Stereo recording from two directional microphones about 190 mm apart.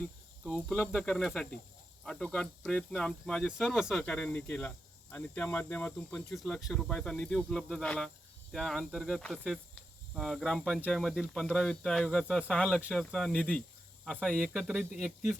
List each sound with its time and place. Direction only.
0.4 s speech: 5° right (ahead or behind)